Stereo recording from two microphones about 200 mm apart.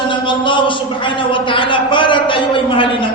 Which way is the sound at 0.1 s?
25° left (ahead or behind).